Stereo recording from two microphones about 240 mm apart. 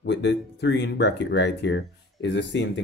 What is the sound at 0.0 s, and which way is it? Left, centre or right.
Speech, left.